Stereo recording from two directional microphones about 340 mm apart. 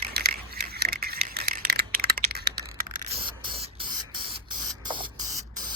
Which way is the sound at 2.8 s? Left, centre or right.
Centre.